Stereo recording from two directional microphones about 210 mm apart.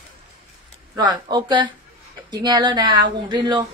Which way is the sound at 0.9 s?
20° right (ahead or behind).